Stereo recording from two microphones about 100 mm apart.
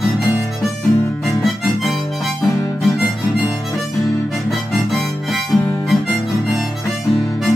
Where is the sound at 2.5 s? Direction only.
30° left (ahead or behind).